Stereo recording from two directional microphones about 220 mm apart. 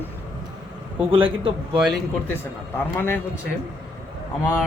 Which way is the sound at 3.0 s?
10° left (ahead or behind).